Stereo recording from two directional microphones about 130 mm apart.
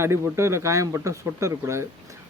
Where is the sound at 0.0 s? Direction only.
20° right (ahead or behind).